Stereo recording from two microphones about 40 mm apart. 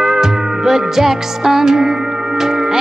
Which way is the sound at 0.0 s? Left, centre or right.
Centre.